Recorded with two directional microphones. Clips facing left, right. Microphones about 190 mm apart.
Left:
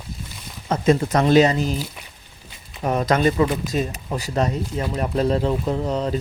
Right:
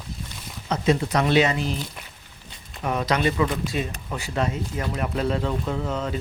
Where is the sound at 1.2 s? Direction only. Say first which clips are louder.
Left 6 dB; 35° left (ahead or behind).